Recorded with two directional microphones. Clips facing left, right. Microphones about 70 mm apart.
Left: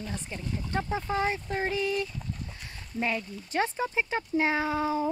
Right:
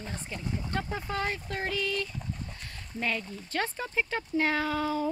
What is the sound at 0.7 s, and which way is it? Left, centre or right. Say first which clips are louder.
Speech: left 5 dB; centre.